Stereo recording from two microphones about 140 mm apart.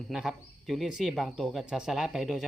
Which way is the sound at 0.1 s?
Centre (ahead or behind).